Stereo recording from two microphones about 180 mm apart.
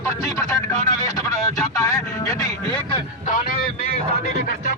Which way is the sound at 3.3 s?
50° left (ahead or behind).